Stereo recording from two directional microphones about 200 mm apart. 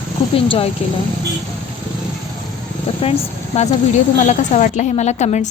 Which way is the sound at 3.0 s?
30° left (ahead or behind).